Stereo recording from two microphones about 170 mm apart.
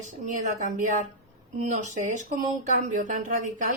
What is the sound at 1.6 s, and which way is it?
Speech, 45° right (ahead or behind).